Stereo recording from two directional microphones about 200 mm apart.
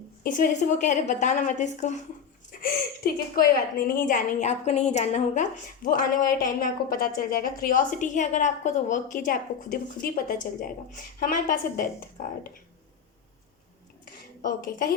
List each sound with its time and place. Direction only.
0.2 s a woman's voice: 40° left (ahead or behind)
2.5 s a woman's voice: 45° left (ahead or behind)
14.0 s dishes: 45° left (ahead or behind)